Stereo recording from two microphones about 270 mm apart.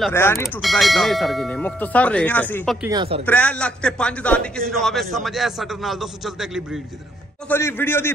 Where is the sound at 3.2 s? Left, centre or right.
Centre.